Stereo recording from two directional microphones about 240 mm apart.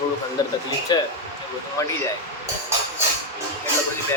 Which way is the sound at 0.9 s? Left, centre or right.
Centre.